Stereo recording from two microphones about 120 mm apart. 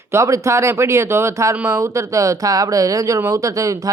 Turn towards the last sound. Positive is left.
turn(degrees=-30)  # may be behind; listen again after turning